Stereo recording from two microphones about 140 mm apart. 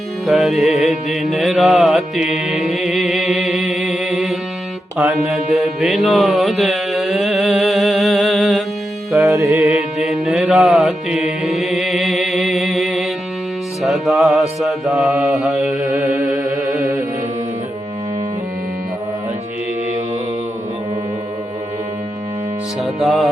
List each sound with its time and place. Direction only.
0.3 s music: centre (ahead or behind)
9.2 s music: 25° right (ahead or behind)
9.6 s mantra: 5° right (ahead or behind)
13.8 s music: centre (ahead or behind)
14.6 s mantra: centre (ahead or behind)
22.8 s music: centre (ahead or behind)